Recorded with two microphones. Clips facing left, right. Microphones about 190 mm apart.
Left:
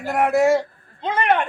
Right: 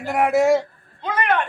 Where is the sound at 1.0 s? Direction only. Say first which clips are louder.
Left 2 dB; 25° left (ahead or behind).